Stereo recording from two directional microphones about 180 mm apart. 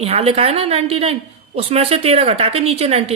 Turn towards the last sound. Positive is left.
turn(degrees=-35)  # may be behind; listen again after turning